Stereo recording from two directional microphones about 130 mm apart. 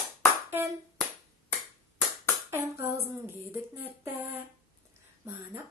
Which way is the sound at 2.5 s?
15° right (ahead or behind).